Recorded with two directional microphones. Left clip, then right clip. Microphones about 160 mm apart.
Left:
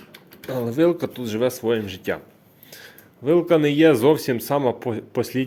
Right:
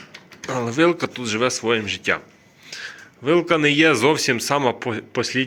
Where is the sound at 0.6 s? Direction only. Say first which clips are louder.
Right 1 dB; 15° left (ahead or behind).